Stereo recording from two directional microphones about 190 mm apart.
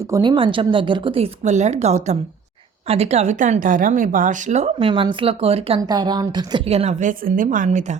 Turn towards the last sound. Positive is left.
turn(degrees=-40)  # may be behind; listen again after turning